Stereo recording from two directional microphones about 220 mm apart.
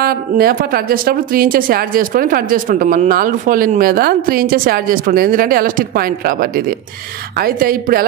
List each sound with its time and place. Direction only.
0.0 s a woman's voice: 45° right (ahead or behind)